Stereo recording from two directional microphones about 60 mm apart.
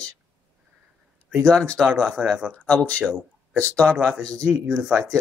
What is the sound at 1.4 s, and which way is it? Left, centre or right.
Speech, centre.